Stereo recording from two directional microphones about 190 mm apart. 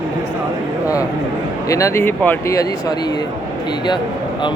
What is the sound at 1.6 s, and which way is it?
Speech, 15° left (ahead or behind).